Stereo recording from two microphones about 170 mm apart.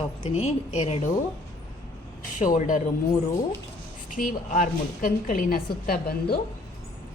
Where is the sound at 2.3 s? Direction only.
50° left (ahead or behind).